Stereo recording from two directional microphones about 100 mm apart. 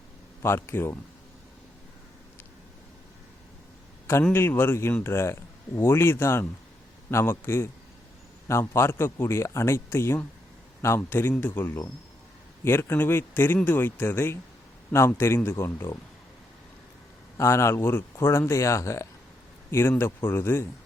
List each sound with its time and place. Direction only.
0.4 s speech: 25° left (ahead or behind)
4.3 s speech: 20° left (ahead or behind)
17.3 s speech: 30° left (ahead or behind)